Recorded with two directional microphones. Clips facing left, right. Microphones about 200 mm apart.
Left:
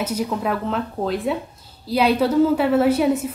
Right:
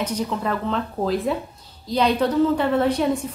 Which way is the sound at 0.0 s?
10° left (ahead or behind).